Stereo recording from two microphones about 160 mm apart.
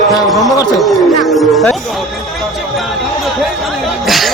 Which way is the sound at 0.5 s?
25° left (ahead or behind).